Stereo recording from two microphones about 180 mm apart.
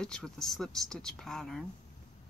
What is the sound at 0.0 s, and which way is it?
Speech, 5° left (ahead or behind).